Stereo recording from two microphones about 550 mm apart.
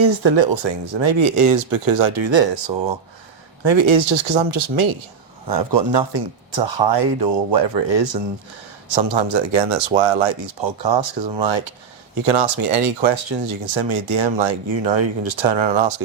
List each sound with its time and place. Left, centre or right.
0.0 s speech: right